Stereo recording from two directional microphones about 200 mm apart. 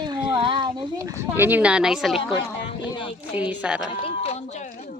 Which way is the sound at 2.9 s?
25° left (ahead or behind).